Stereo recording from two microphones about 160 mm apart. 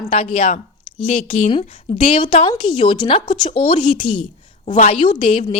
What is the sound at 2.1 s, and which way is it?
A woman's voice, 30° left (ahead or behind).